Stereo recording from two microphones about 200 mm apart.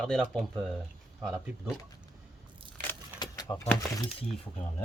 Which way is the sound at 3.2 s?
20° left (ahead or behind).